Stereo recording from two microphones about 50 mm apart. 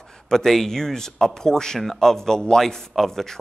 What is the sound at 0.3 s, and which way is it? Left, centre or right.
Speech, centre.